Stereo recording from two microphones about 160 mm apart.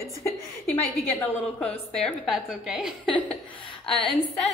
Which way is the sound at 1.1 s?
10° left (ahead or behind).